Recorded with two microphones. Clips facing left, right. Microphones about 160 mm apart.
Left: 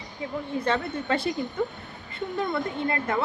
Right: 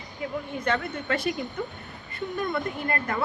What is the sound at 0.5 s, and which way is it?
A woman's voice, 30° left (ahead or behind).